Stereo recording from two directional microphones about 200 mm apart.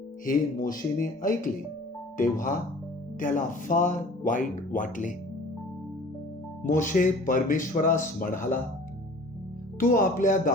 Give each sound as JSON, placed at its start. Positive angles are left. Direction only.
{"t": 0.3, "sound": "speech", "side_deg": 45}
{"t": 6.6, "sound": "speech", "side_deg": 40}
{"t": 9.8, "sound": "speech", "side_deg": 40}